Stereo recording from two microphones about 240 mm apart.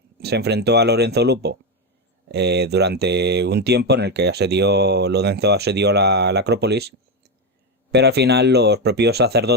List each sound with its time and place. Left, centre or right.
0.2 s speech: right